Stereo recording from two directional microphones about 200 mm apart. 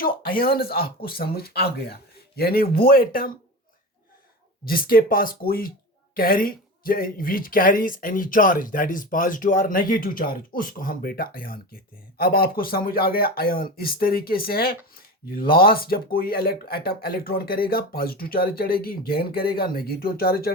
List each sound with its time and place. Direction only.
0.0 s speech: 50° left (ahead or behind)
4.6 s speech: 45° left (ahead or behind)